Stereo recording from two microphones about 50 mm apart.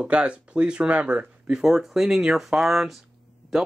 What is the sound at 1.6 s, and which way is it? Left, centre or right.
Speech, centre.